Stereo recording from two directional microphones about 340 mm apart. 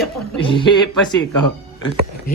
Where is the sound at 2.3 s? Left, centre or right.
Left.